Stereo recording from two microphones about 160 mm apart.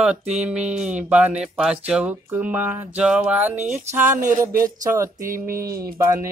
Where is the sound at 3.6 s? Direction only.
45° right (ahead or behind).